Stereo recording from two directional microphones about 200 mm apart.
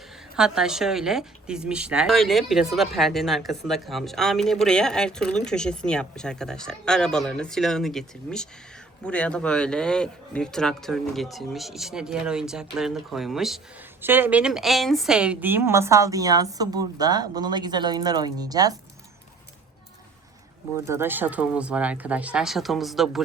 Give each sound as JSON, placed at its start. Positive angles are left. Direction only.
{"t": 0.3, "sound": "a woman's voice", "side_deg": -5}
{"t": 20.8, "sound": "a woman's voice", "side_deg": -10}